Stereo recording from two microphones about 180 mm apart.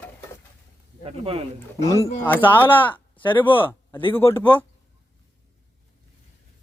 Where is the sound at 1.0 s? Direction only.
30° right (ahead or behind).